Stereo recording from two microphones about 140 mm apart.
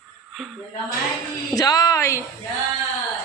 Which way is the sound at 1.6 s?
25° left (ahead or behind).